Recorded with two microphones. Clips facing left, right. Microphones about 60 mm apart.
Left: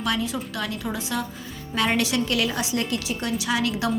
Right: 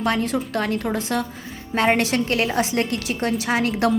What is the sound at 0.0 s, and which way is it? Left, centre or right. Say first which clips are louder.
A woman's voice: right 4 dB; right.